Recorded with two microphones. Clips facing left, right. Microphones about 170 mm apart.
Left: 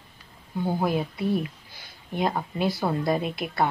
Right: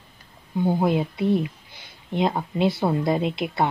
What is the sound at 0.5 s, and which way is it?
Speech, 20° right (ahead or behind).